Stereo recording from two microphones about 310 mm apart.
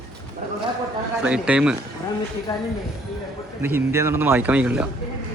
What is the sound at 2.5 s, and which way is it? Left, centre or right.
Speech, centre.